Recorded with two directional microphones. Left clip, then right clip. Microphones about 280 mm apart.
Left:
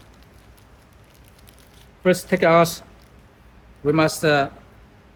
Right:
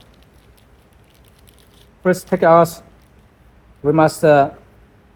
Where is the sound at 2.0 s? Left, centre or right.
Centre.